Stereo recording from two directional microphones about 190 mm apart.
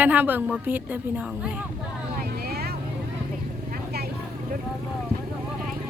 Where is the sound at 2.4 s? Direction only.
55° right (ahead or behind).